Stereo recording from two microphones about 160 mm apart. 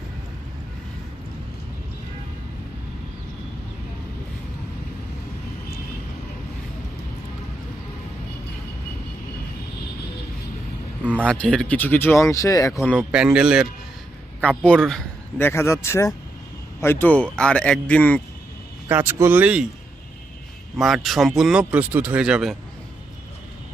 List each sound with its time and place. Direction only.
11.0 s a sound: 10° right (ahead or behind)
11.3 s speech: 5° left (ahead or behind)
13.0 s speech: 5° right (ahead or behind)
15.4 s speech: 15° left (ahead or behind)
18.9 s speech: 15° right (ahead or behind)
20.7 s speech: centre (ahead or behind)